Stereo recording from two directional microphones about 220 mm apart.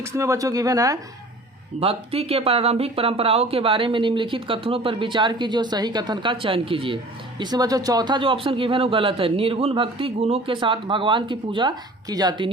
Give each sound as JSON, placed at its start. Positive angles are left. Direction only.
{"t": 0.0, "sound": "speech", "side_deg": -15}
{"t": 1.8, "sound": "speech", "side_deg": -25}